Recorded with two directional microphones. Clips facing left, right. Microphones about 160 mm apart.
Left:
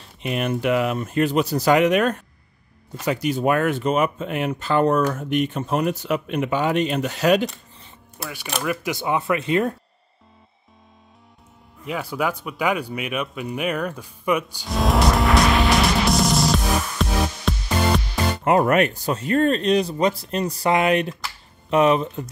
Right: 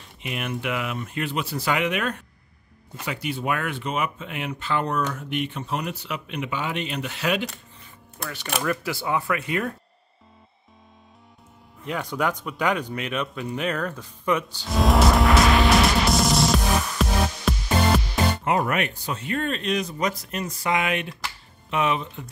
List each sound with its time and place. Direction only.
0.2 s speech: 40° left (ahead or behind)
8.2 s speech: 10° left (ahead or behind); by 9.8 s 25° left (ahead or behind)
11.8 s speech: 5° left (ahead or behind)
14.7 s music: centre (ahead or behind)
18.4 s speech: 45° left (ahead or behind)